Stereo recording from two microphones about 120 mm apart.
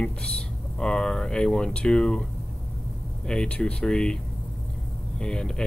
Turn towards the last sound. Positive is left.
turn(degrees=5)  # may be behind; listen again after turning